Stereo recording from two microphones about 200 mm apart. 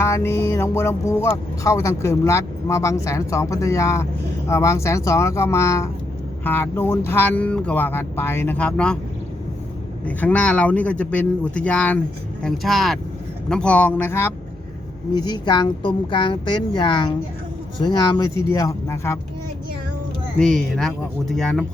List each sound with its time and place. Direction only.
0.0 s speech: 15° left (ahead or behind)
10.1 s speech: 5° left (ahead or behind)
20.4 s speech: 5° left (ahead or behind)